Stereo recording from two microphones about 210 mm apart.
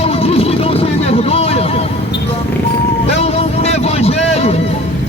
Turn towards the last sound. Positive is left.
turn(degrees=30)  # may be behind; listen again after turning